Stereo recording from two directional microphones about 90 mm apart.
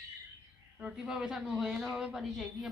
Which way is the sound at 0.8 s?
5° right (ahead or behind).